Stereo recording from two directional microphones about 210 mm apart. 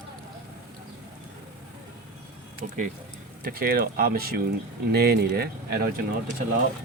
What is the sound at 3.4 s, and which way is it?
Speech, 45° right (ahead or behind).